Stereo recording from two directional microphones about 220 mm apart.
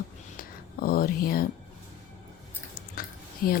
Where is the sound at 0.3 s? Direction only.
40° left (ahead or behind).